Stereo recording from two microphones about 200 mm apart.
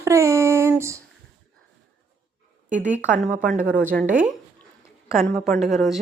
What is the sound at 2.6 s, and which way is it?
Speech, 40° right (ahead or behind).